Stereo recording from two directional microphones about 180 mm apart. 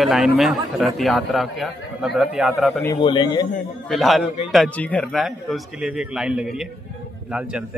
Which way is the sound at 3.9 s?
Centre (ahead or behind).